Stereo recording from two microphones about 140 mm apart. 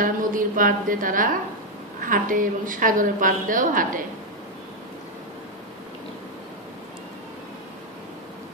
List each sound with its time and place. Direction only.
0.0 s a woman's voice: 80° right